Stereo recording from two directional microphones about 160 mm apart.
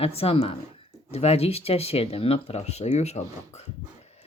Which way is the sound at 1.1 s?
40° left (ahead or behind).